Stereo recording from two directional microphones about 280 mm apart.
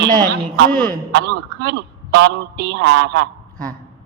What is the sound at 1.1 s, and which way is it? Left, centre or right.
A man's voice, right.